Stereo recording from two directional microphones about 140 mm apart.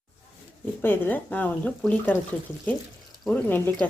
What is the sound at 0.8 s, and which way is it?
Speech, 15° left (ahead or behind).